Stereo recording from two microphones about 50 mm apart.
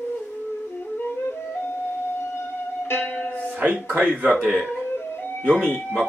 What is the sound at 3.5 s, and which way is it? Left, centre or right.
Speech, right.